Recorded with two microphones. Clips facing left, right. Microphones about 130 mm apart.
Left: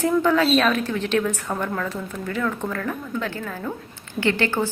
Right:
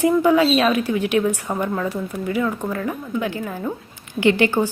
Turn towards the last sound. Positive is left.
turn(degrees=-15)  # may be behind; listen again after turning